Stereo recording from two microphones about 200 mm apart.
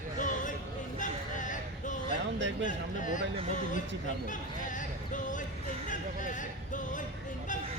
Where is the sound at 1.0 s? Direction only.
40° left (ahead or behind).